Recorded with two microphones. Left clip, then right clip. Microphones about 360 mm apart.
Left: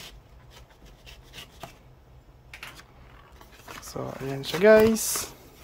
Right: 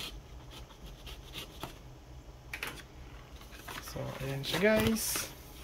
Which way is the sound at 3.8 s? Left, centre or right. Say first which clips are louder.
Left 7 dB; centre.